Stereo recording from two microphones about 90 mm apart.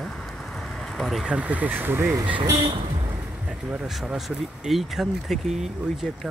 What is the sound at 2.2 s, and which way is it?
Speech, 70° right (ahead or behind).